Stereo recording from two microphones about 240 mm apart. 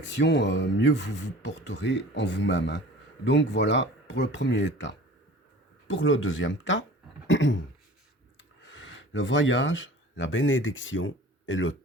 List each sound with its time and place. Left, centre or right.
0.0 s speech: left
7.3 s throat clearing: left
8.4 s speech: left